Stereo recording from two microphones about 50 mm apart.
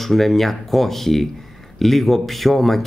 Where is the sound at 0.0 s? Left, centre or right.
Centre.